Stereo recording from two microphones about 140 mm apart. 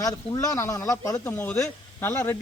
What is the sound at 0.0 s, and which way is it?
A man's voice, 25° left (ahead or behind).